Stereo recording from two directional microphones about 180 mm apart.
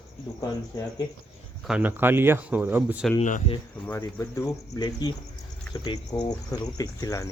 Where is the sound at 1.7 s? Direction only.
10° right (ahead or behind).